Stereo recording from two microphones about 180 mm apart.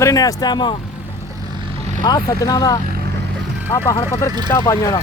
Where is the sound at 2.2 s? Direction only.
20° left (ahead or behind).